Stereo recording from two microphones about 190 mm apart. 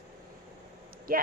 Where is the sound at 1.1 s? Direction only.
50° right (ahead or behind).